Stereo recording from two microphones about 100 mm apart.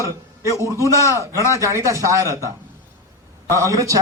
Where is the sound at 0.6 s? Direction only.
30° right (ahead or behind).